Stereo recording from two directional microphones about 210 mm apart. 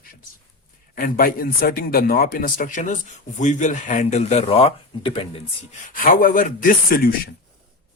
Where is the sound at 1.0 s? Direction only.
45° left (ahead or behind); by 5.4 s 25° left (ahead or behind).